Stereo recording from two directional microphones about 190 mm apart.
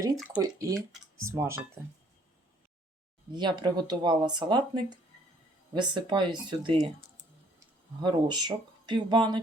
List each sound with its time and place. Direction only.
0.0 s speech: 20° right (ahead or behind)
3.3 s speech: 25° right (ahead or behind)
8.0 s speech: 20° right (ahead or behind)